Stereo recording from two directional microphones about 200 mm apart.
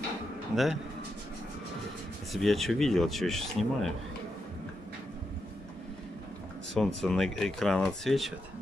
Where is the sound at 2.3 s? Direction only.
Centre (ahead or behind).